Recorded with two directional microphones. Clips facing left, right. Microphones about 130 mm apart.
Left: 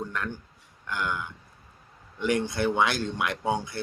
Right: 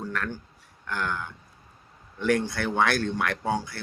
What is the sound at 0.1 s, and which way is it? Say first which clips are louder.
Speech: right 1 dB; 20° left (ahead or behind).